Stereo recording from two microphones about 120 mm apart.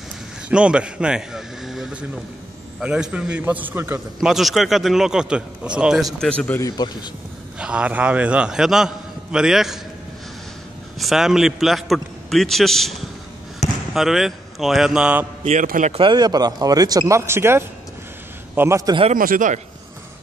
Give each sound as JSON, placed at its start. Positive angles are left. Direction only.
{"t": 0.5, "sound": "a man's voice", "side_deg": -10}
{"t": 4.2, "sound": "a man's voice", "side_deg": 0}
{"t": 6.1, "sound": "a man's voice", "side_deg": 5}
{"t": 6.6, "sound": "a man's voice", "side_deg": 35}
{"t": 7.5, "sound": "a man's voice", "side_deg": -10}
{"t": 11.0, "sound": "a man's voice", "side_deg": 0}
{"t": 13.6, "sound": "basketball bounce", "side_deg": 70}
{"t": 13.9, "sound": "a man's voice", "side_deg": 0}
{"t": 15.4, "sound": "a man's voice", "side_deg": -70}
{"t": 16.0, "sound": "a man's voice", "side_deg": -35}